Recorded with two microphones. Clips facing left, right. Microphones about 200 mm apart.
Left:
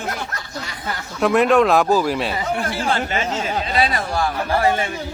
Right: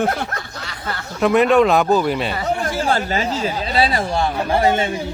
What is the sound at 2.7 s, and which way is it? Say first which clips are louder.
Speech: right 2 dB; 40° right (ahead or behind).